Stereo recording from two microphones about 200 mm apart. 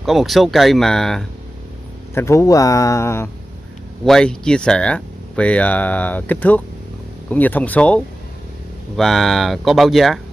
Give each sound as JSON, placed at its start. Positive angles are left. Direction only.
{"t": 0.0, "sound": "speech", "side_deg": 0}
{"t": 2.1, "sound": "speech", "side_deg": 15}
{"t": 4.0, "sound": "speech", "side_deg": 5}